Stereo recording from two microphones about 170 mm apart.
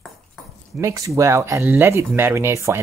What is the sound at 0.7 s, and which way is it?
Speech, 20° right (ahead or behind).